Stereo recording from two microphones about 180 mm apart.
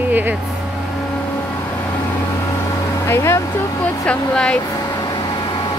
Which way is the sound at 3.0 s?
15° left (ahead or behind).